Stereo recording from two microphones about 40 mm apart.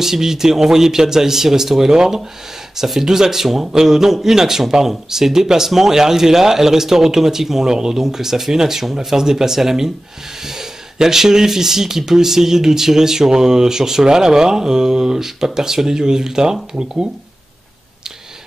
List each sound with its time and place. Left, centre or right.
0.0 s speech: centre